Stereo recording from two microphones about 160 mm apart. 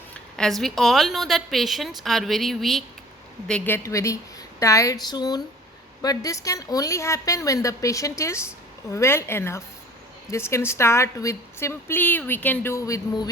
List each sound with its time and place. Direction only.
0.1 s a woman's voice: 5° left (ahead or behind)
3.8 s a woman's voice: 20° left (ahead or behind)